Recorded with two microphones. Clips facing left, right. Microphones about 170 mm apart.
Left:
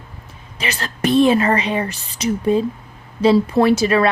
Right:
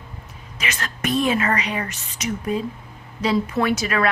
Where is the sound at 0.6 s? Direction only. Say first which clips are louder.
Left 6 dB; 30° left (ahead or behind).